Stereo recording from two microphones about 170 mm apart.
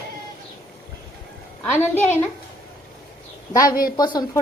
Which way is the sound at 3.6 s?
60° left (ahead or behind).